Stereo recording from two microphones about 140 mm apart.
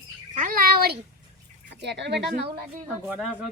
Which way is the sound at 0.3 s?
80° right.